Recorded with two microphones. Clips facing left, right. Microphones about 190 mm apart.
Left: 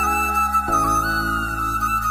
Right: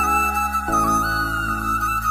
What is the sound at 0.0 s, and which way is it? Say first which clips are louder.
Flute: right 1 dB; centre (ahead or behind).